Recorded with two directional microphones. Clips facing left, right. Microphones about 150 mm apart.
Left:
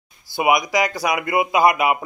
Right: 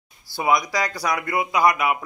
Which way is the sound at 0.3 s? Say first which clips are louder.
Left 3 dB; 20° left (ahead or behind).